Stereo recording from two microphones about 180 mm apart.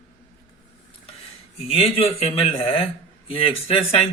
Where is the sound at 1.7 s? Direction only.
35° left (ahead or behind).